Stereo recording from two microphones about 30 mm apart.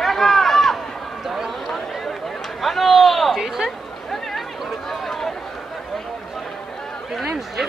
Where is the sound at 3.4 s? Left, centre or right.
Centre.